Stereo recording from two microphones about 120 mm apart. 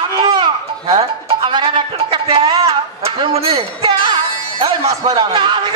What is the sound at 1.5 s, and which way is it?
Music, 40° right (ahead or behind).